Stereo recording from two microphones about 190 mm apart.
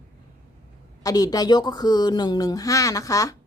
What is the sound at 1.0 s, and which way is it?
A woman's voice, 20° left (ahead or behind).